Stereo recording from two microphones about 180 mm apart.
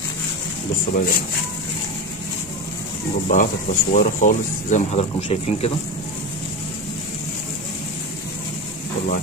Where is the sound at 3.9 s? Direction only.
45° left (ahead or behind).